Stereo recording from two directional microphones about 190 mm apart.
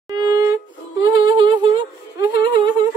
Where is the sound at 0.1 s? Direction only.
20° right (ahead or behind).